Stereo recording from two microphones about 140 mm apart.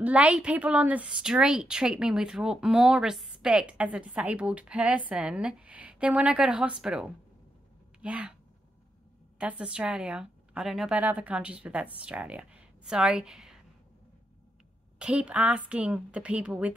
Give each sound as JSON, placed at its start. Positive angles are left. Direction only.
{"t": 0.0, "sound": "a woman's voice", "side_deg": -10}
{"t": 9.4, "sound": "a woman's voice", "side_deg": -10}
{"t": 15.0, "sound": "a woman's voice", "side_deg": -5}